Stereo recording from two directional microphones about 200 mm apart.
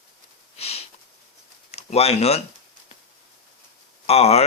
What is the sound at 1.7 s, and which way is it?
Speech, 30° left (ahead or behind).